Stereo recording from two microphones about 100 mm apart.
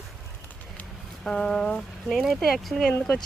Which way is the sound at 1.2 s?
5° left (ahead or behind).